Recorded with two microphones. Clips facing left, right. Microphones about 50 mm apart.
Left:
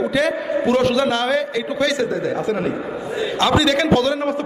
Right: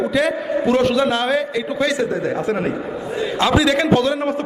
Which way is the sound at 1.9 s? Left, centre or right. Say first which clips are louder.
Even; right.